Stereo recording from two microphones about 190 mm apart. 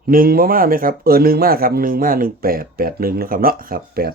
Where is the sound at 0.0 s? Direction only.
50° right (ahead or behind).